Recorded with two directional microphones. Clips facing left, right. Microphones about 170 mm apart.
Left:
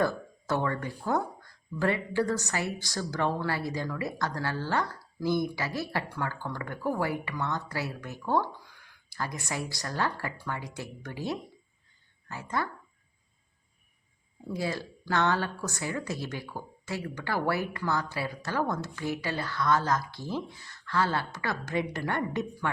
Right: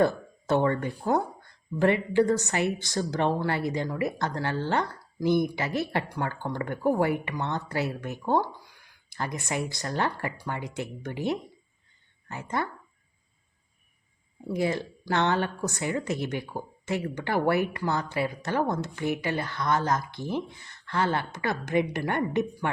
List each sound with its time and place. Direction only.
0.0 s speech: 25° right (ahead or behind)
14.4 s speech: 20° right (ahead or behind)